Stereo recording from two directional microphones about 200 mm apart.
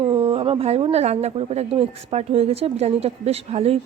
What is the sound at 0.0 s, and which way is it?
A woman's voice, 25° right (ahead or behind).